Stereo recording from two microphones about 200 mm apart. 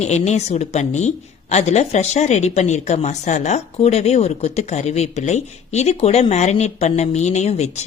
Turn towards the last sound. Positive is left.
turn(degrees=35)  # may be behind; listen again after turning